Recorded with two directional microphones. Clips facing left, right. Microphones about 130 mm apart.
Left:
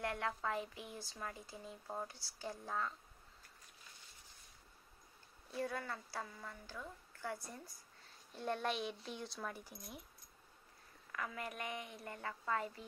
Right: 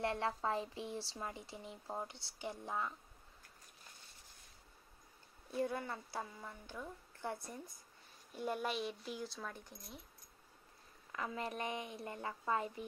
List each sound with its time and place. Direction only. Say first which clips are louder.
0.0 s speech: right 3 dB; 30° right (ahead or behind)
5.5 s speech: right 3 dB; 20° right (ahead or behind)
8.4 s speech: even; 10° right (ahead or behind)
11.1 s speech: right 3 dB; 25° right (ahead or behind)